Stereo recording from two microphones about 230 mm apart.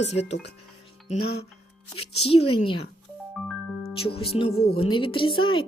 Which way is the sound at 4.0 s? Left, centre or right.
Left.